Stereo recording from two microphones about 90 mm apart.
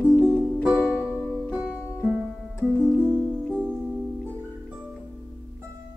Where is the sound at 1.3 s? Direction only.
15° right (ahead or behind).